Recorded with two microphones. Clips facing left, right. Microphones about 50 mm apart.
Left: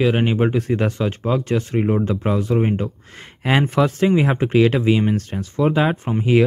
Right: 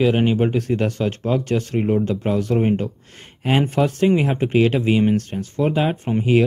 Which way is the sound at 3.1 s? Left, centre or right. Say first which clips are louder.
Left 2 dB; left.